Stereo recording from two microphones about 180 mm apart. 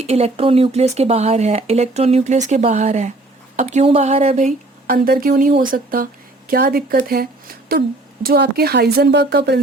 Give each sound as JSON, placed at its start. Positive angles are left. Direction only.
{"t": 0.0, "sound": "speech", "side_deg": -35}